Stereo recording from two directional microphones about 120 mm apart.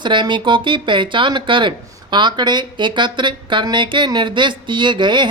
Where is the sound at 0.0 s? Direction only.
40° right (ahead or behind).